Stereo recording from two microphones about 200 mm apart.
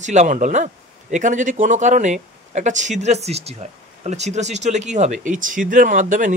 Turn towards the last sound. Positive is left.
turn(degrees=-40)  # may be behind; listen again after turning